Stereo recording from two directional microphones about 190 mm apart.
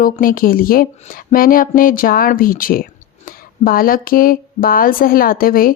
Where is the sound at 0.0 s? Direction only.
45° left (ahead or behind).